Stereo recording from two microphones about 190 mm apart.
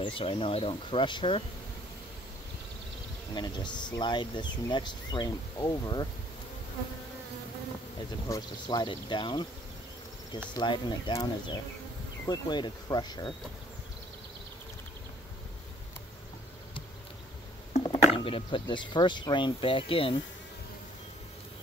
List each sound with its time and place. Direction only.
0.0 s speech: 30° left (ahead or behind)
3.3 s speech: 20° left (ahead or behind)
8.3 s speech: 20° left (ahead or behind)
10.5 s speech: 25° left (ahead or behind)
18.1 s speech: 30° left (ahead or behind)